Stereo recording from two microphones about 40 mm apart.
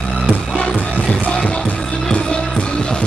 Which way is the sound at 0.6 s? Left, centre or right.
Left.